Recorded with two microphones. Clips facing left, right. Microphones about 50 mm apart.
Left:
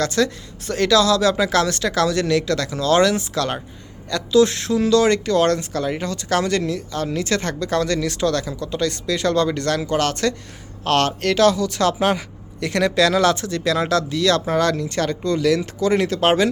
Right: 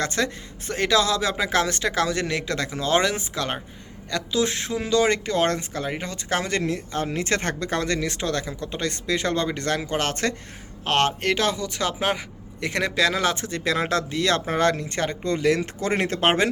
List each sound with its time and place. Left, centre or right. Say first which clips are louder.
0.0 s speech: left 5 dB; right